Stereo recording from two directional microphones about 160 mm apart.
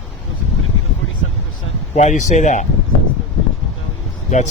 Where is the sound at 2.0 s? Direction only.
45° left (ahead or behind).